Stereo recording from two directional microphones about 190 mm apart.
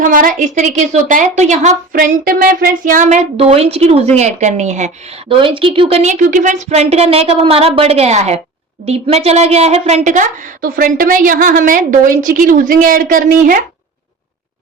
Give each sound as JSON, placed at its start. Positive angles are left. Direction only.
{"t": 0.0, "sound": "a woman's voice", "side_deg": -45}
{"t": 5.3, "sound": "a woman's voice", "side_deg": -25}